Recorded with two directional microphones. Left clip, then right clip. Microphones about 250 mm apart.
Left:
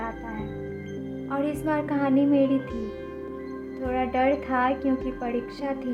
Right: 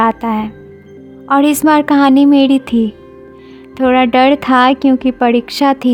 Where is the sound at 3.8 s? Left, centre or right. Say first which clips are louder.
Right 15 dB; right.